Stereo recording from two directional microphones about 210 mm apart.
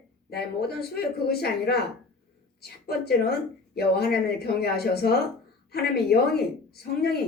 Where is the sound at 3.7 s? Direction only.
50° left (ahead or behind).